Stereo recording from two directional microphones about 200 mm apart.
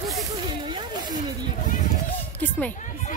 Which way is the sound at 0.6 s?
20° right (ahead or behind).